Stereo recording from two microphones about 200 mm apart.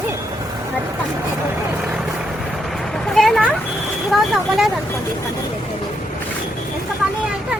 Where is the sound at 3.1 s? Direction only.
Centre (ahead or behind).